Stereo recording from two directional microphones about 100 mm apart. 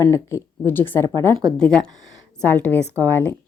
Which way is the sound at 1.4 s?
10° left (ahead or behind).